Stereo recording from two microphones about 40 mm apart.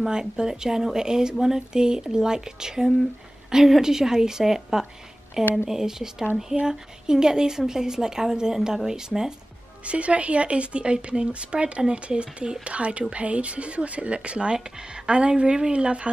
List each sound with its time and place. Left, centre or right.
0.1 s a woman's voice: centre
5.4 s speech: left
5.7 s a woman's voice: centre
9.8 s a woman's voice: right